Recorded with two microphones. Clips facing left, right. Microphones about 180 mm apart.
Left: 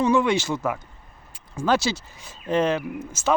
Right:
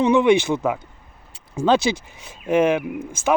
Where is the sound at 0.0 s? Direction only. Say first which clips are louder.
Right 5 dB; 20° right (ahead or behind).